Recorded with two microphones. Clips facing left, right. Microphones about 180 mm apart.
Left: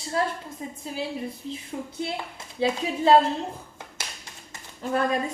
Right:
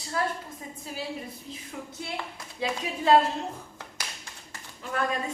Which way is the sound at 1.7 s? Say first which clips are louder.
Left 4 dB; 30° left (ahead or behind).